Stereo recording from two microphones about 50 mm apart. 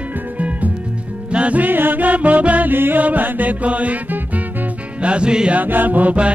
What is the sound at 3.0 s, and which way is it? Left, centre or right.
Mantra, right.